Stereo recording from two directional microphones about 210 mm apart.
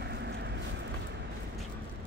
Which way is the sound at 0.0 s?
50° right (ahead or behind).